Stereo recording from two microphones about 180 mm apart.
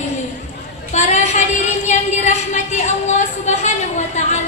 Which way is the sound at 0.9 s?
40° left (ahead or behind).